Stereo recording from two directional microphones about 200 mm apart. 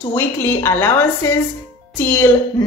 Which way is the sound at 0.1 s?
10° left (ahead or behind).